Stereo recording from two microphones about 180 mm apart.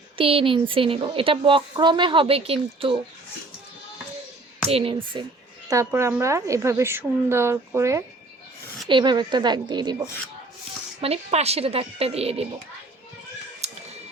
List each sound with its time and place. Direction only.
0.2 s a woman's voice: 30° right (ahead or behind)
4.7 s speech: 30° right (ahead or behind)
5.6 s a woman's voice: 15° right (ahead or behind)
11.0 s speech: 35° right (ahead or behind)
13.6 s music: 35° right (ahead or behind)